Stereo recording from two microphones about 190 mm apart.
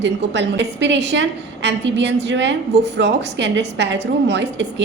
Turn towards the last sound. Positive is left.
turn(degrees=-70)  # may be behind; listen again after turning